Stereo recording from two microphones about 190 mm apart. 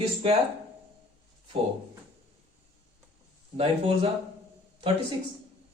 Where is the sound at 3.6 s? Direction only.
30° right (ahead or behind).